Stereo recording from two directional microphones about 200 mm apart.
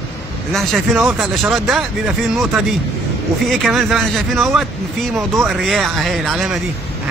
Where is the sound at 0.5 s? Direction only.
Centre (ahead or behind).